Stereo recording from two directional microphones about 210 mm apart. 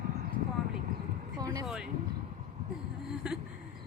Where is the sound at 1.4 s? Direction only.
20° right (ahead or behind).